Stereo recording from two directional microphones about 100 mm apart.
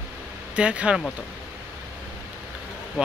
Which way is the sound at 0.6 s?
10° right (ahead or behind).